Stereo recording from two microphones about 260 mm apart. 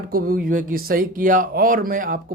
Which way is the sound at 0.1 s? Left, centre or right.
Right.